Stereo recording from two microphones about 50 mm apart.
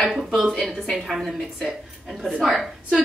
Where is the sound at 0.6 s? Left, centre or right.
Centre.